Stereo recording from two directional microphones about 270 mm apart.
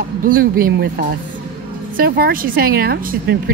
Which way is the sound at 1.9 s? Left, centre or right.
Right.